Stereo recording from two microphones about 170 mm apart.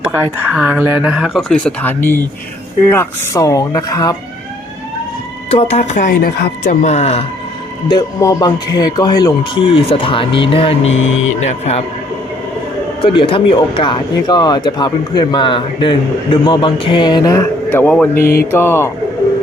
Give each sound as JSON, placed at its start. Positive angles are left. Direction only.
{"t": 0.1, "sound": "speech", "side_deg": -20}
{"t": 5.5, "sound": "speech", "side_deg": 35}
{"t": 6.8, "sound": "speech", "side_deg": 40}
{"t": 7.9, "sound": "speech", "side_deg": 25}
{"t": 13.1, "sound": "speech", "side_deg": 30}
{"t": 17.7, "sound": "speech", "side_deg": 10}